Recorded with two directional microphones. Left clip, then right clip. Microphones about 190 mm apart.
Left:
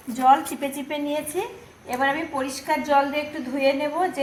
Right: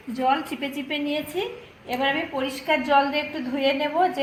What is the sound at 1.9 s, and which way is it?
A woman's voice, 10° right (ahead or behind).